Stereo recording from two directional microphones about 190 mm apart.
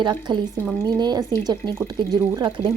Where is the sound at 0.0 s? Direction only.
20° right (ahead or behind).